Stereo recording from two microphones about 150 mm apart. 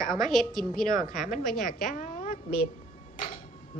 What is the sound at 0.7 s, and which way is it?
Speech, 65° left (ahead or behind).